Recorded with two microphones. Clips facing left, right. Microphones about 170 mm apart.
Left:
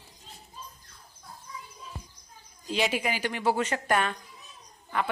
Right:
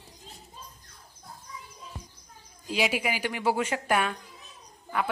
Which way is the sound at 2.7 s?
10° right (ahead or behind).